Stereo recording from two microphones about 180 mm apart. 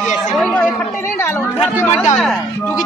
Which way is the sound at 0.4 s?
5° left (ahead or behind).